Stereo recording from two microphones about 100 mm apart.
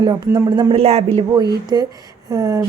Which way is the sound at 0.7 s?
85° right.